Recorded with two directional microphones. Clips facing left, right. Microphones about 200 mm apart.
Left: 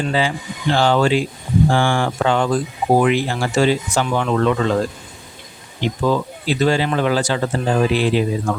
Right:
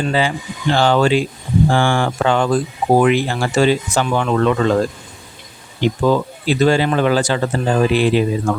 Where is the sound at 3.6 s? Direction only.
60° right (ahead or behind).